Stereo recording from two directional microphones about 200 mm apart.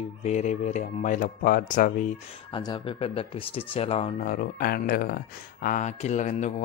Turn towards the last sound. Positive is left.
turn(degrees=35)  # may be behind; listen again after turning